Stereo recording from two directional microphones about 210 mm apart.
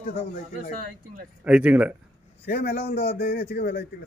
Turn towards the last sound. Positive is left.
turn(degrees=50)  # may be behind; listen again after turning